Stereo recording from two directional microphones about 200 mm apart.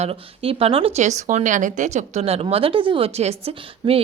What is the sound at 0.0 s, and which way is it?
Speech, 30° right (ahead or behind).